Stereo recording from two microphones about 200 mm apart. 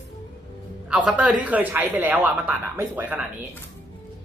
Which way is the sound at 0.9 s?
5° right (ahead or behind).